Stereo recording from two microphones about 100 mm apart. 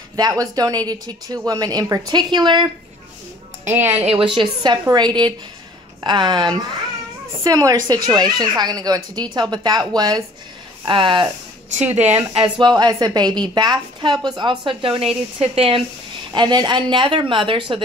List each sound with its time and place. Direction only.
0.1 s speech: 35° right (ahead or behind)
3.6 s speech: 20° right (ahead or behind)
4.0 s a woman's voice: 65° right (ahead or behind)
4.8 s speech: 45° right (ahead or behind)
10.9 s speech: 55° right (ahead or behind)
12.0 s speech: 20° right (ahead or behind)
12.4 s a woman's voice: 50° right (ahead or behind); by 15.8 s 70° right (ahead or behind)
16.3 s speech: 50° right (ahead or behind)